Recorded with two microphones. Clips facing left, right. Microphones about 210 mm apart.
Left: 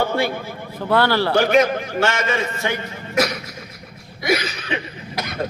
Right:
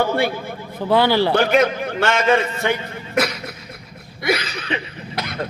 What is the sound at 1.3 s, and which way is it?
A man's voice, 55° right (ahead or behind).